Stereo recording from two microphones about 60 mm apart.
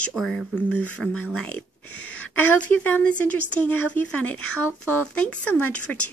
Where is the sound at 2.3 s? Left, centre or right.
Left.